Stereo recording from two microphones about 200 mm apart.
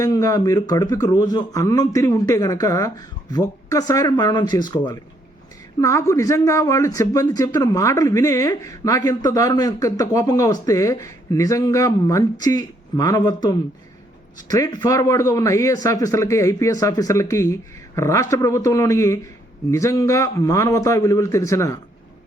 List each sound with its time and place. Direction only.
0.0 s speech: 15° left (ahead or behind)